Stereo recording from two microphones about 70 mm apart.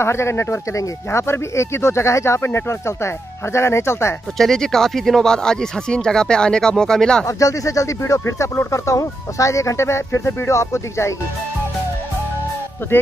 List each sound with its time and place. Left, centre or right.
0.0 s speech: left
4.4 s speech: centre
7.2 s speech: left